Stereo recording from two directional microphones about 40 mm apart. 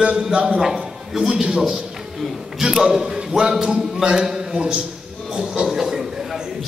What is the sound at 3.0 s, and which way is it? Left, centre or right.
A man's voice, right.